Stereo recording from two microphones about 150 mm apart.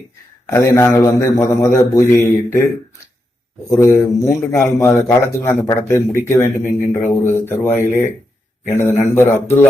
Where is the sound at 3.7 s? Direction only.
20° left (ahead or behind).